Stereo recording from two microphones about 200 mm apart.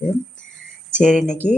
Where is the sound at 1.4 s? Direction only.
35° left (ahead or behind).